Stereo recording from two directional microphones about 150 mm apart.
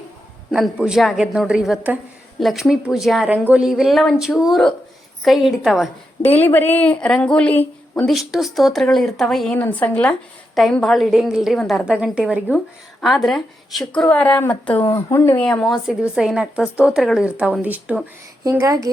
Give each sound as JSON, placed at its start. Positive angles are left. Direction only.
{"t": 0.5, "sound": "a woman's voice", "side_deg": -5}
{"t": 6.4, "sound": "a woman's voice", "side_deg": 10}
{"t": 15.4, "sound": "a woman's voice", "side_deg": 5}
{"t": 18.5, "sound": "a woman's voice", "side_deg": -20}